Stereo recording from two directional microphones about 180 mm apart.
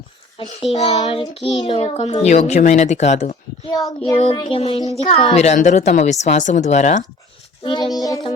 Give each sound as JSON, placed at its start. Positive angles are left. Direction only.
{"t": 0.7, "sound": "speech", "side_deg": 35}
{"t": 0.9, "sound": "child singing", "side_deg": 20}
{"t": 1.3, "sound": "speech", "side_deg": 35}
{"t": 4.2, "sound": "speech", "side_deg": 30}
{"t": 7.6, "sound": "child singing", "side_deg": 25}